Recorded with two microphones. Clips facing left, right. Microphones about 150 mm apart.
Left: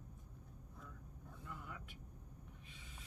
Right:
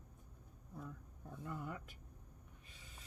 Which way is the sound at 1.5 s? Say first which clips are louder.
Right 6 dB; 45° right (ahead or behind).